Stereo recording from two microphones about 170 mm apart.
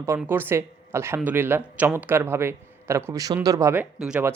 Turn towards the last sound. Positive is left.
turn(degrees=-10)  # may be behind; listen again after turning